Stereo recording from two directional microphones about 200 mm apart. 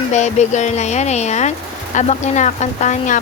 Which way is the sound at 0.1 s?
35° left (ahead or behind).